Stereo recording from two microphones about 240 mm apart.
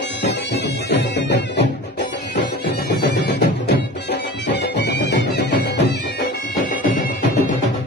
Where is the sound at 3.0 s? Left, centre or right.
Left.